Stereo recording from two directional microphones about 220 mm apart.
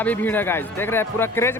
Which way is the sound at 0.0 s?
10° left (ahead or behind).